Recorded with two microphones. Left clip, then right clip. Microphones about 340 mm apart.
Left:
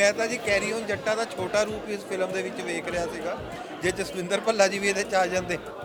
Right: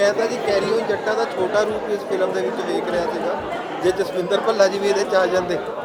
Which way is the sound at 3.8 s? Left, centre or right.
Left.